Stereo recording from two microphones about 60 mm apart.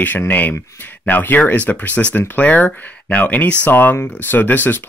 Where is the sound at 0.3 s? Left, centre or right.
Left.